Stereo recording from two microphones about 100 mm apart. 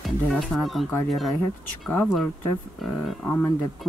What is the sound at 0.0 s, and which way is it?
Music, centre (ahead or behind).